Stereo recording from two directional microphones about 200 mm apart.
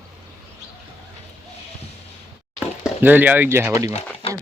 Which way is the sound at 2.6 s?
10° right (ahead or behind).